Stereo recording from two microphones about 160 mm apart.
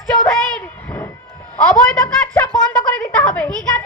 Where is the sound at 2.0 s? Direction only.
15° left (ahead or behind).